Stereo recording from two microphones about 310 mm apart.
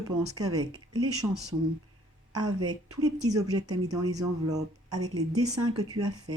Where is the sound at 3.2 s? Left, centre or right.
Centre.